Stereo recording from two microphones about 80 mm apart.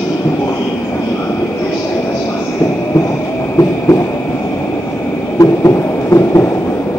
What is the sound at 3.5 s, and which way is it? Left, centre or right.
Train, left.